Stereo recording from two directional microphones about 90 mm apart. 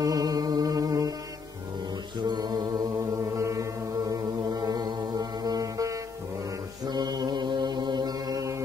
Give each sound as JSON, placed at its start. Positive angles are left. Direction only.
{"t": 0.0, "sound": "music", "side_deg": -45}
{"t": 2.1, "sound": "mantra", "side_deg": -50}